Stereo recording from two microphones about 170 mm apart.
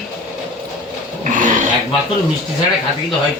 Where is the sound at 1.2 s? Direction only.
50° right (ahead or behind).